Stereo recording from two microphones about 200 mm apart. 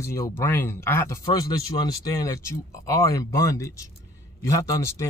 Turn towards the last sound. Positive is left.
turn(degrees=15)  # may be behind; listen again after turning